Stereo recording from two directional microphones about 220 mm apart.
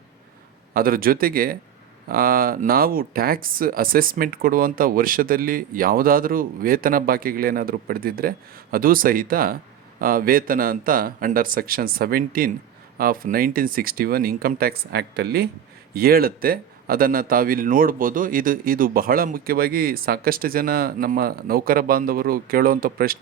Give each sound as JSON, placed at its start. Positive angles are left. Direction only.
{"t": 0.7, "sound": "speech", "side_deg": -40}